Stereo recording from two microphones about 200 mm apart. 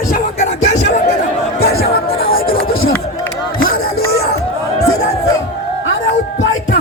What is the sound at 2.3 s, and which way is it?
Chop, 45° left (ahead or behind).